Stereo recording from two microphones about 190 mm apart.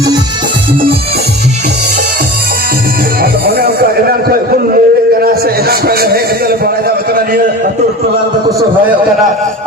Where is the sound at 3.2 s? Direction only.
50° right (ahead or behind).